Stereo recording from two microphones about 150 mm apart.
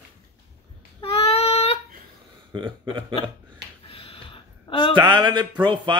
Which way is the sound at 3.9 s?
35° left (ahead or behind).